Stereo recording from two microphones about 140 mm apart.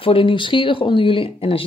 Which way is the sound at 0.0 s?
40° left (ahead or behind).